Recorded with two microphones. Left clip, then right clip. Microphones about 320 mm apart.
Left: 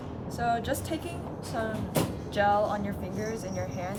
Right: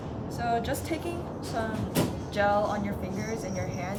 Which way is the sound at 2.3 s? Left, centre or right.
Centre.